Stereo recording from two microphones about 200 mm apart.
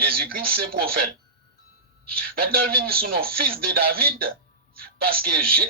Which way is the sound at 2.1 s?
45° right (ahead or behind).